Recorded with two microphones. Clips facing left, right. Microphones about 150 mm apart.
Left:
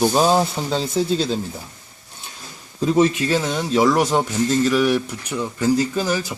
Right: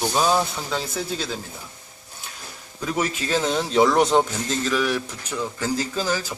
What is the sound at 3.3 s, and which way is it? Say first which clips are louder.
Speech: left 2 dB; centre (ahead or behind).